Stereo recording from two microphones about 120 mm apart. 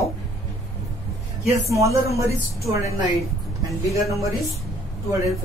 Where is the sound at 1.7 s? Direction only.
25° right (ahead or behind).